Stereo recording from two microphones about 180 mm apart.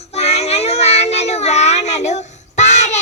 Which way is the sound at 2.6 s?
40° left (ahead or behind).